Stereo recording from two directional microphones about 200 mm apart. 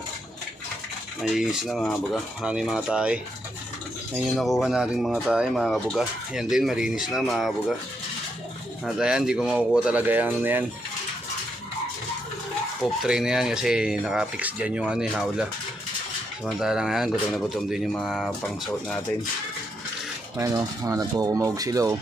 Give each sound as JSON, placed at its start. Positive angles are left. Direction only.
{"t": 1.2, "sound": "speech", "side_deg": -5}
{"t": 4.4, "sound": "speech", "side_deg": 0}
{"t": 8.8, "sound": "speech", "side_deg": -5}
{"t": 12.8, "sound": "speech", "side_deg": 0}
{"t": 16.5, "sound": "speech", "side_deg": 0}
{"t": 20.3, "sound": "speech", "side_deg": -15}